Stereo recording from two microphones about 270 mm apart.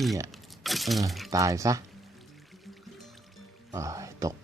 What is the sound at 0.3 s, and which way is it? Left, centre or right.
Crumpling, centre.